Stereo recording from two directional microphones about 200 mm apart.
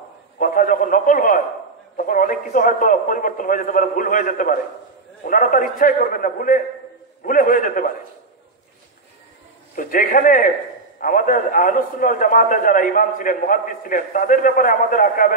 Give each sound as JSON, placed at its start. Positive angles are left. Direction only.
{"t": 0.4, "sound": "a man's voice", "side_deg": 45}
{"t": 9.8, "sound": "a man's voice", "side_deg": 45}